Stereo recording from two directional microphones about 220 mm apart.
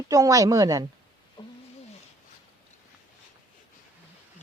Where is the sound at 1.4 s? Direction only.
20° left (ahead or behind).